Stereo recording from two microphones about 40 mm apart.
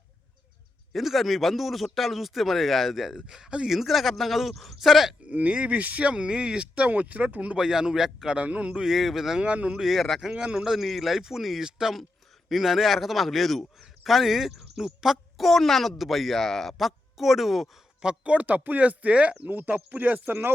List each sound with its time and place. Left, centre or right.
0.9 s speech: centre
5.3 s speech: right
6.8 s speech: right
7.5 s a man's voice: centre
8.4 s speech: right
8.9 s a man's voice: centre
9.4 s speech: right
9.9 s speech: centre
10.3 s speech: right
10.7 s a man's voice: centre
18.0 s speech: right
19.4 s speech: right